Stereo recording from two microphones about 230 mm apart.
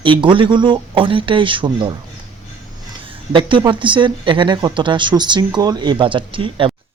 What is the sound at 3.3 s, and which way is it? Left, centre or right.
Speech, right.